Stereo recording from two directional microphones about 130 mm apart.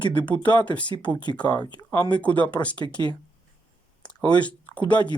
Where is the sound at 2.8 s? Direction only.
35° left (ahead or behind).